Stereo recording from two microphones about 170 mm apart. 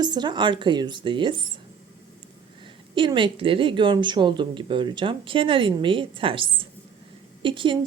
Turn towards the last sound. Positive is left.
turn(degrees=-30)  # may be behind; listen again after turning